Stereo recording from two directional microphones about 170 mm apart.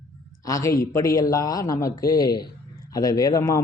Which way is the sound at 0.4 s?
20° left (ahead or behind).